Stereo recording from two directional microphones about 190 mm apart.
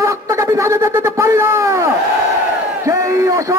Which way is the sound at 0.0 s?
15° right (ahead or behind).